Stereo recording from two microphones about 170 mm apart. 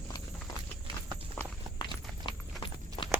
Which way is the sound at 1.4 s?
10° left (ahead or behind).